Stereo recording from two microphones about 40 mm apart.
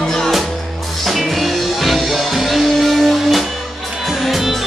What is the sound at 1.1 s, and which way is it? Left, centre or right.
Music, centre.